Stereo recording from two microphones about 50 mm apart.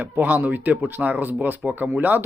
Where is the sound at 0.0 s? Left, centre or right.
Right.